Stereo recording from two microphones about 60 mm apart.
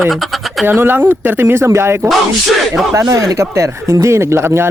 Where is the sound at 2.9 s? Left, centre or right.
Right.